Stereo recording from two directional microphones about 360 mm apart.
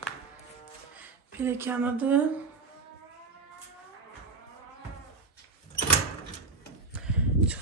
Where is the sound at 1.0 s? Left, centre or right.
Centre.